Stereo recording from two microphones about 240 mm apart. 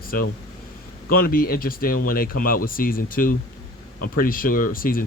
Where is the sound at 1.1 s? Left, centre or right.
Left.